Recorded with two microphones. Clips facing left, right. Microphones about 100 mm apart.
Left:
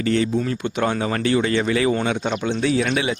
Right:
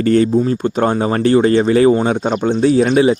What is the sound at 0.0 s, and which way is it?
Speech, 45° right (ahead or behind).